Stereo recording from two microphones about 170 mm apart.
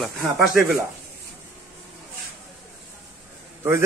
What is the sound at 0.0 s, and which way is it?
Speech, centre (ahead or behind).